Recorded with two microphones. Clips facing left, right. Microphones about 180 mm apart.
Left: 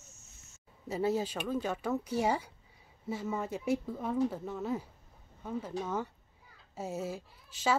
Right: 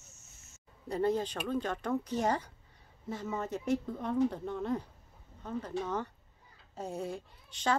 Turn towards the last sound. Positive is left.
turn(degrees=5)  # may be behind; listen again after turning